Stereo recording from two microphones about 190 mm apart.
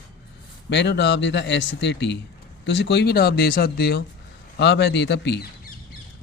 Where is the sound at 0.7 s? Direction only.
65° left (ahead or behind).